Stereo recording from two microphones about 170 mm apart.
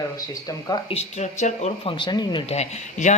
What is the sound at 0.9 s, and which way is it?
Speech, 40° left (ahead or behind).